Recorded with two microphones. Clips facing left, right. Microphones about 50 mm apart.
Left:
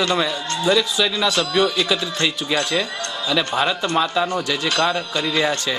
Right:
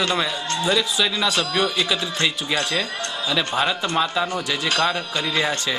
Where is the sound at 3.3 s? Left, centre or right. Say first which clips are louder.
Left 2 dB; centre.